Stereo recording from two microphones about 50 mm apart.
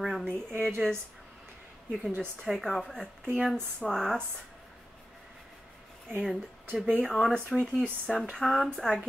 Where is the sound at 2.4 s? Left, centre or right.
Centre.